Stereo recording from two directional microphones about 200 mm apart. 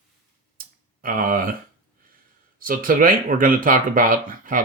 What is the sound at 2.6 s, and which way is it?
Speech, 45° right (ahead or behind).